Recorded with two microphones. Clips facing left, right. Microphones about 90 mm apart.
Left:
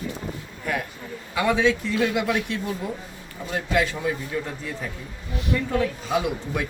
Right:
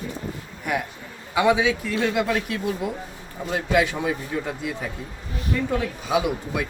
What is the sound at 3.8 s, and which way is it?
Speech, 15° right (ahead or behind).